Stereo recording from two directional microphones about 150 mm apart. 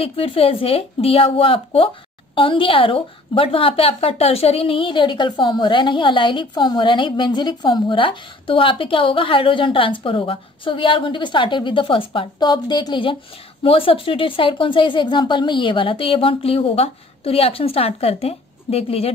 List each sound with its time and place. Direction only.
0.0 s a woman's voice: 40° left (ahead or behind)